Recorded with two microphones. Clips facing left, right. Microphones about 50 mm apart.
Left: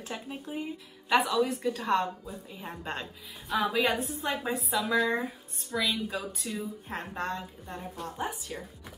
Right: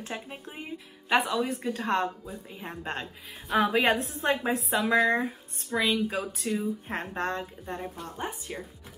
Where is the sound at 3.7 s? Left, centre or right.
Right.